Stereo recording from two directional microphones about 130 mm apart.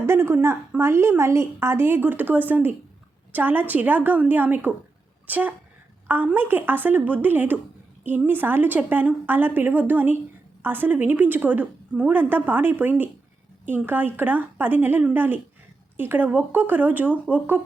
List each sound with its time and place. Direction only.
0.0 s a woman's voice: 20° right (ahead or behind)